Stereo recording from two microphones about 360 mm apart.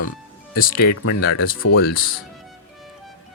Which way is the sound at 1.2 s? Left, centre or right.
Left.